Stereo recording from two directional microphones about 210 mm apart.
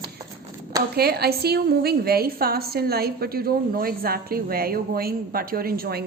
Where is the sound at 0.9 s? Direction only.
50° right (ahead or behind).